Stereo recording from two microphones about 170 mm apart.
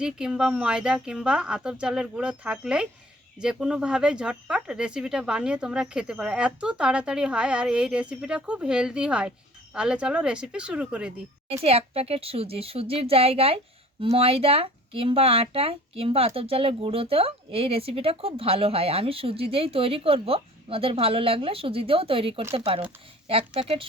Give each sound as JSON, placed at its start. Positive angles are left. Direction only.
{"t": 0.0, "sound": "speech", "side_deg": -5}
{"t": 11.4, "sound": "speech", "side_deg": -35}